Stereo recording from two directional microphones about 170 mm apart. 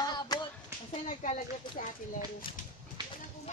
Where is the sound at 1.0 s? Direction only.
45° left (ahead or behind).